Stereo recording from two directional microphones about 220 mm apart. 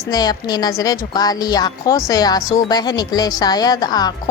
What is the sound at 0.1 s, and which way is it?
A woman's voice, 15° left (ahead or behind).